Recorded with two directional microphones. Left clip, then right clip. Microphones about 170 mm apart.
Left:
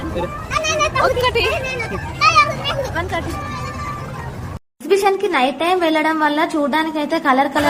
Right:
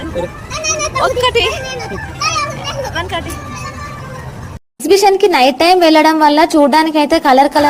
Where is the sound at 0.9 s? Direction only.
5° right (ahead or behind).